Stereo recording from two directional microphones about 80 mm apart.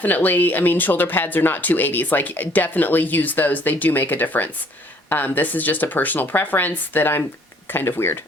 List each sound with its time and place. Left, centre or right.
0.0 s speech: left